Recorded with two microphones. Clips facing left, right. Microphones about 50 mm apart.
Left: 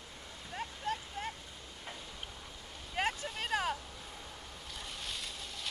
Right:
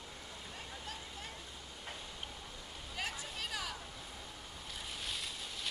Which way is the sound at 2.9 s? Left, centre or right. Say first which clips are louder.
Left 7 dB; left.